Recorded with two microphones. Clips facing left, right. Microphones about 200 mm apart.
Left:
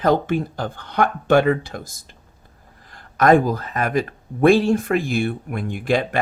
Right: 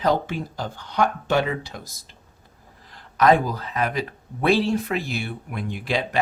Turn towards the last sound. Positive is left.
turn(degrees=50)  # may be behind; listen again after turning